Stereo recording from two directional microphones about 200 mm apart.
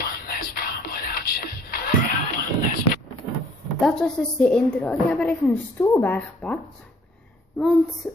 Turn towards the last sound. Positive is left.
turn(degrees=0)  # may be behind; listen again after turning